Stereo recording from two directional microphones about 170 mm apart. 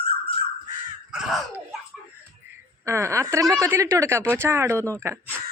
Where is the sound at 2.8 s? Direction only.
15° right (ahead or behind).